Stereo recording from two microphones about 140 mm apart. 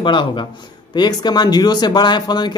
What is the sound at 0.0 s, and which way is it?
A man's voice, 35° left (ahead or behind).